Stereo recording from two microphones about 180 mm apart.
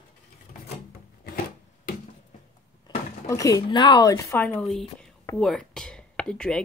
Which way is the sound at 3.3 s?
20° left (ahead or behind).